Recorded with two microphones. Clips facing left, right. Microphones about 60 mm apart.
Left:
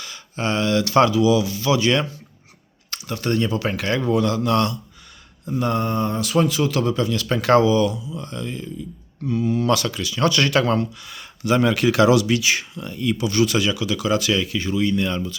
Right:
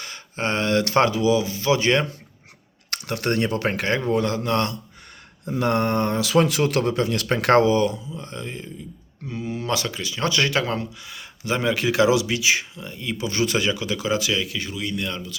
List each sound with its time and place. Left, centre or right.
0.0 s speech: right
2.9 s speech: right
5.5 s speech: right
7.9 s speech: centre
8.2 s speech: right
13.2 s speech: right
14.1 s speech: centre